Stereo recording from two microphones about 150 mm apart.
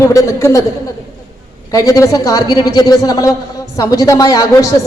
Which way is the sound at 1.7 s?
20° left (ahead or behind).